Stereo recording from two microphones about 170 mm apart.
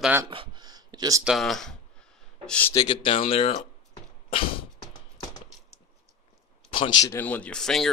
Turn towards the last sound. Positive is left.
turn(degrees=5)  # may be behind; listen again after turning